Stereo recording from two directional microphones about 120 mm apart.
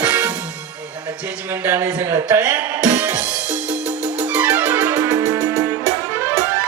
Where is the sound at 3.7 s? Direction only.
10° right (ahead or behind).